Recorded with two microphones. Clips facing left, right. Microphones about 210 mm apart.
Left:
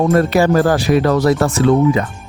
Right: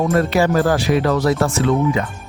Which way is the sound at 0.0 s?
45° left (ahead or behind).